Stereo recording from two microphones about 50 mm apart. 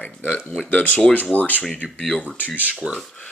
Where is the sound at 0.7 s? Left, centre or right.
Left.